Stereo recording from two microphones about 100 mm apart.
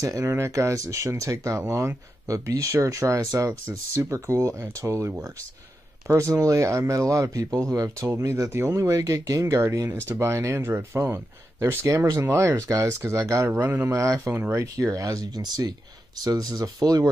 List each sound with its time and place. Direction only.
0.0 s speech: 30° right (ahead or behind)
14.9 s speech: 40° right (ahead or behind)